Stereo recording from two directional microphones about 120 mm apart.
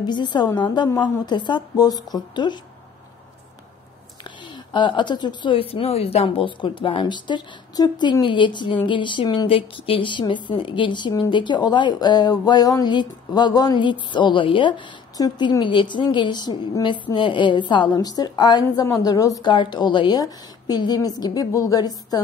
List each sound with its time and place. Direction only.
0.0 s speech: 40° left (ahead or behind)
4.7 s speech: 40° left (ahead or behind)